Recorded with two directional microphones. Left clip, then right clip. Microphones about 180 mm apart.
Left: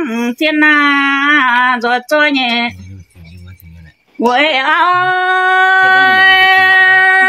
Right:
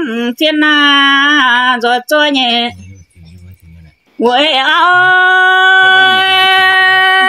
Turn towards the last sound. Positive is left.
turn(degrees=-35)  # may be behind; listen again after turning